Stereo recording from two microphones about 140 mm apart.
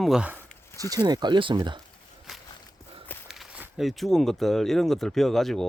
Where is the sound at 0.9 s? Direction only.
30° right (ahead or behind).